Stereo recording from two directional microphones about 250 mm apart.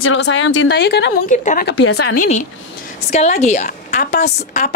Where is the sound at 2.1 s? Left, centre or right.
Left.